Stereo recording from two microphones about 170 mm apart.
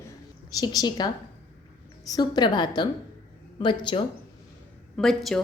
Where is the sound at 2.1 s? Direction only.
25° left (ahead or behind).